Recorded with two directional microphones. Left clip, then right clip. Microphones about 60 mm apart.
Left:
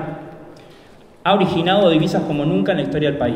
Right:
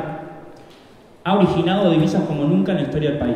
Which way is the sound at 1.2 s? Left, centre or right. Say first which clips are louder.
Left 2 dB; left.